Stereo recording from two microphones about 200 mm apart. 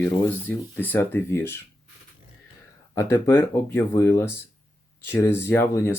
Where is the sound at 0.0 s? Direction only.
10° left (ahead or behind).